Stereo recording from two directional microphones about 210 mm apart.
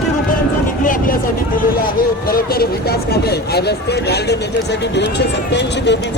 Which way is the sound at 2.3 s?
45° left (ahead or behind).